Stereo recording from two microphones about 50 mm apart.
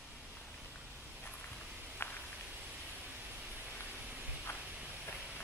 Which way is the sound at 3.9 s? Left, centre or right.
Right.